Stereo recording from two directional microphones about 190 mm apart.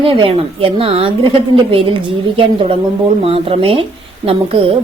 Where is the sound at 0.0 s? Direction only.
30° right (ahead or behind).